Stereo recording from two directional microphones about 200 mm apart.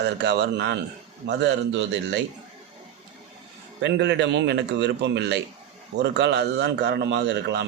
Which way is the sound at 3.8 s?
60° right (ahead or behind).